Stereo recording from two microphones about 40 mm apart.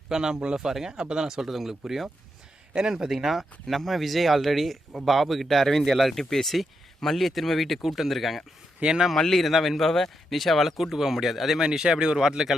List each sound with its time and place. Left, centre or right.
0.1 s speech: centre
8.8 s speech: right
9.1 s speech: centre
11.6 s speech: centre